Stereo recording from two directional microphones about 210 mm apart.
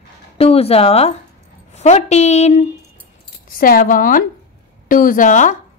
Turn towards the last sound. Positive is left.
turn(degrees=35)  # may be behind; listen again after turning